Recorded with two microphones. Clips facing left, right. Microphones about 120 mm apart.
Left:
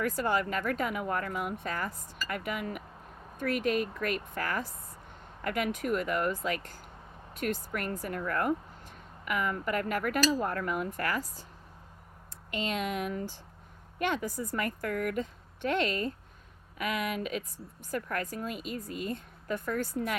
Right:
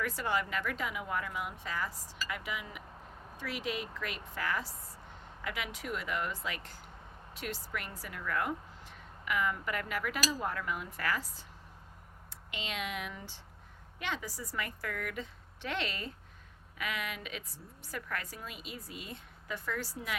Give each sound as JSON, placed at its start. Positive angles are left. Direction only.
{"t": 0.0, "sound": "speech", "side_deg": 45}
{"t": 12.5, "sound": "speech", "side_deg": 45}